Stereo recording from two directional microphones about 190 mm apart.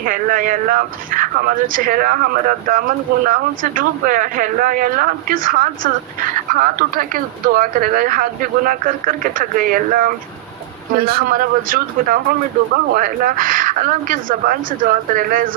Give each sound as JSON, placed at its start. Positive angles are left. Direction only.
{"t": 0.0, "sound": "speech", "side_deg": -45}